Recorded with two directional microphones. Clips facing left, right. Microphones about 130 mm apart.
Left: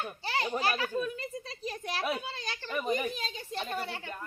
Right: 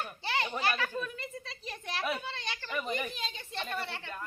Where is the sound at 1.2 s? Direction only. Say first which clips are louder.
Left 4 dB; 40° left (ahead or behind).